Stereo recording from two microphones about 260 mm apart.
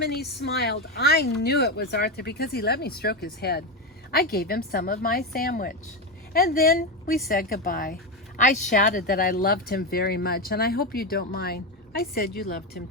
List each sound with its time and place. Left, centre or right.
0.0 s speech: left